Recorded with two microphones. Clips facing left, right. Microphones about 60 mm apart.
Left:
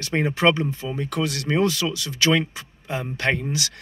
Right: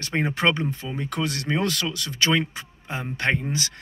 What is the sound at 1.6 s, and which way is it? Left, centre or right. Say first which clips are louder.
Speech: left 4 dB; right.